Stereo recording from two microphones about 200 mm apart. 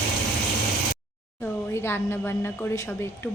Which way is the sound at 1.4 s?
10° left (ahead or behind).